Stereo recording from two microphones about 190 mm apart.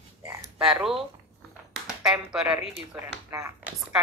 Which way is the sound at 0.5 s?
5° right (ahead or behind).